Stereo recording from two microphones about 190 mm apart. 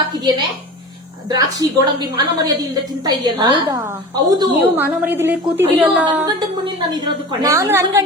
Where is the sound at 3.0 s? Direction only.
20° right (ahead or behind).